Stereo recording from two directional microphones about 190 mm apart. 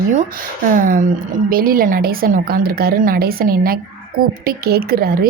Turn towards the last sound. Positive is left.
turn(degrees=-50)  # may be behind; listen again after turning